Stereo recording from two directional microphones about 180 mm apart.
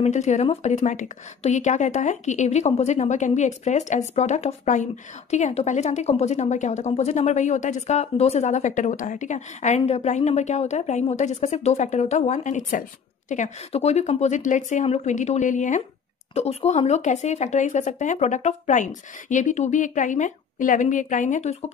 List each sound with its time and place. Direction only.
0.0 s a woman's voice: 40° left (ahead or behind)